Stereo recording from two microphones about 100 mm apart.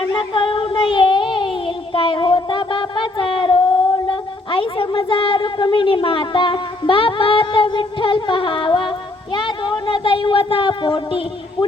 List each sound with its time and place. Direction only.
0.1 s child singing: 55° left (ahead or behind)
4.1 s speech: 60° left (ahead or behind)